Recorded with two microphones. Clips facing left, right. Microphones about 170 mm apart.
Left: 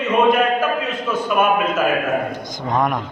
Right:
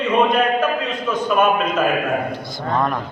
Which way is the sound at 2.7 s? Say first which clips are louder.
Left 1 dB; 15° left (ahead or behind).